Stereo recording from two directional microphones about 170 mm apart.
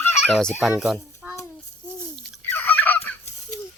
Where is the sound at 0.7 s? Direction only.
Centre (ahead or behind).